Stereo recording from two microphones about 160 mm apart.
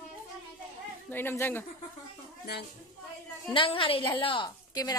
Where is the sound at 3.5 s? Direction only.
35° left (ahead or behind).